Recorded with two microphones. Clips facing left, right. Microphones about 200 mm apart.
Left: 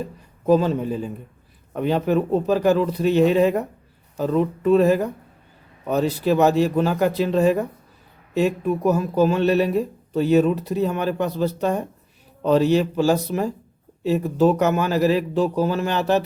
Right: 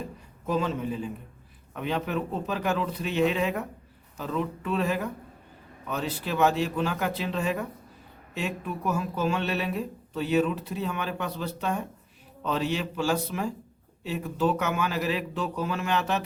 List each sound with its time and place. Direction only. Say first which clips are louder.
0.4 s speech: left 9 dB; 40° left (ahead or behind)